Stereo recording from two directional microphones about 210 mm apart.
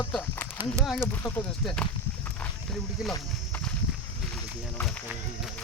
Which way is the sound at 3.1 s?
10° left (ahead or behind).